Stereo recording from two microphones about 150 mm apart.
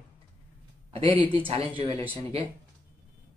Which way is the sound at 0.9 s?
40° right (ahead or behind).